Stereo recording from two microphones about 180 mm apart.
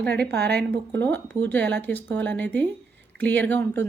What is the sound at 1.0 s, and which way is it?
Speech, 10° left (ahead or behind).